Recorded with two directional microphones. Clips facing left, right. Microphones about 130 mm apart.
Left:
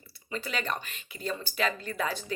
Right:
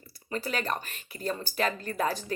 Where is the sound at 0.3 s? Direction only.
40° right (ahead or behind).